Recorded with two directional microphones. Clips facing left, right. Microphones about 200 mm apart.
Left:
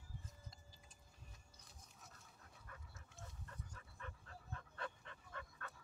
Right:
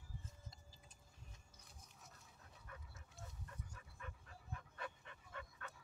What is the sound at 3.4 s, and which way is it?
Dog, 15° right (ahead or behind).